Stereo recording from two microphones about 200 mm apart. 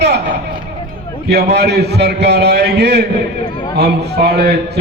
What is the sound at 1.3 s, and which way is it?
A man's voice, 55° right (ahead or behind).